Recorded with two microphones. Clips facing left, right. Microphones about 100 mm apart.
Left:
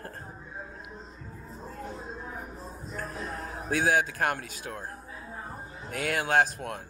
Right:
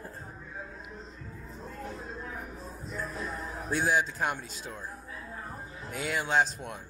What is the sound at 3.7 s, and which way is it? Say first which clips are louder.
Speech: left 2 dB; 55° left (ahead or behind).